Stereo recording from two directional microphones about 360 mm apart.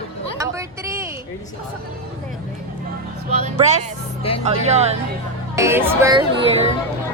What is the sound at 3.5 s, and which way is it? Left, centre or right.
Speech, centre.